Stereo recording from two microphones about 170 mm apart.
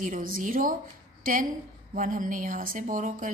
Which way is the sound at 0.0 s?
55° right (ahead or behind).